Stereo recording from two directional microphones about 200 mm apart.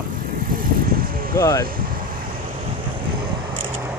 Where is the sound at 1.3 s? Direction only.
15° left (ahead or behind).